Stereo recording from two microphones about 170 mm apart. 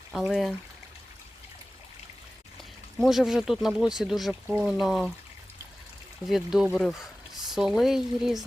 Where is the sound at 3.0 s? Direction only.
Centre (ahead or behind).